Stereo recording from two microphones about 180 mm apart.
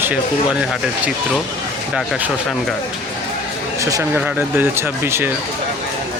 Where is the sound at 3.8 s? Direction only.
20° right (ahead or behind).